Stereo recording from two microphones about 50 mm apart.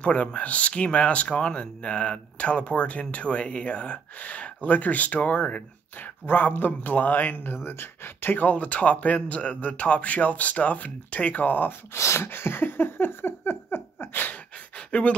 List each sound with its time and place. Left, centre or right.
0.0 s speech: left
11.9 s a sound: left
14.9 s speech: left